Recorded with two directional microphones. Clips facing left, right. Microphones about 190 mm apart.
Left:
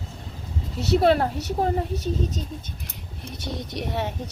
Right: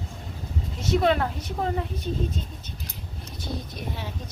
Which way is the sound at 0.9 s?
35° left (ahead or behind).